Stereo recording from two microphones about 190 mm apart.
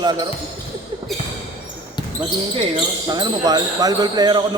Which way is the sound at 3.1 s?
20° right (ahead or behind).